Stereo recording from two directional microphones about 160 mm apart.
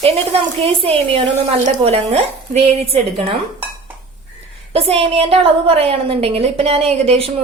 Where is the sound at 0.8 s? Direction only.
35° right (ahead or behind).